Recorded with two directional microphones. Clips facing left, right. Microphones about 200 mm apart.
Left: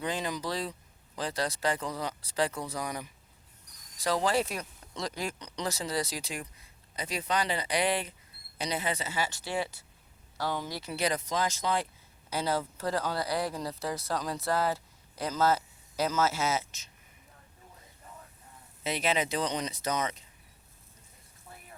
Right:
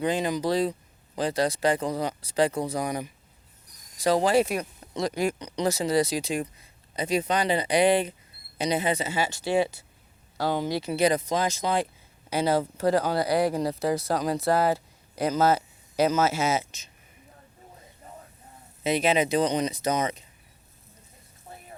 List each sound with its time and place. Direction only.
0.0 s speech: 15° right (ahead or behind)
10.6 s speech: 75° right (ahead or behind)
10.8 s speech: 20° right (ahead or behind)
12.8 s speech: 65° right (ahead or behind)
15.4 s a sound: 70° right (ahead or behind)
16.0 s speech: 20° right (ahead or behind)
18.8 s speech: 20° right (ahead or behind)
21.5 s frying: 25° right (ahead or behind)